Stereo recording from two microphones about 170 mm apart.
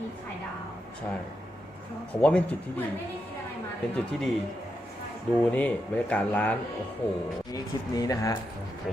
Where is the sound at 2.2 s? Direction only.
5° left (ahead or behind).